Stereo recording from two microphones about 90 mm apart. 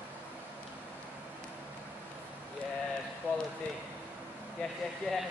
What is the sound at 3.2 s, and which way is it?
Speech, 20° right (ahead or behind).